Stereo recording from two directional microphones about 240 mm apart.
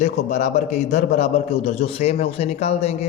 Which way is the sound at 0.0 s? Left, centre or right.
Left.